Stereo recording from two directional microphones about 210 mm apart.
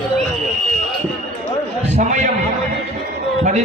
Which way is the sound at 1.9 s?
35° right (ahead or behind).